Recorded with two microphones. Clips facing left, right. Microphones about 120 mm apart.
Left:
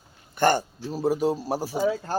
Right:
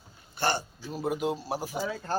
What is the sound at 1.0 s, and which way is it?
Speech, 35° left (ahead or behind).